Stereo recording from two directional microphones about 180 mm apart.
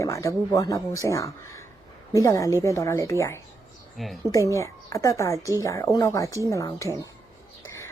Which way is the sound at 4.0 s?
Centre (ahead or behind).